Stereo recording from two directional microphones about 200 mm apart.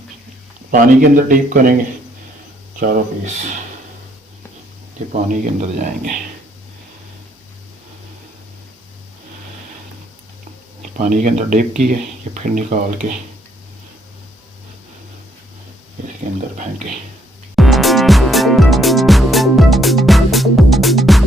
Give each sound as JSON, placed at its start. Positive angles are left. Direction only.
{"t": 0.7, "sound": "speech", "side_deg": -45}
{"t": 2.8, "sound": "speech", "side_deg": -40}
{"t": 5.3, "sound": "speech", "side_deg": -40}
{"t": 10.9, "sound": "speech", "side_deg": -40}
{"t": 17.5, "sound": "music", "side_deg": 0}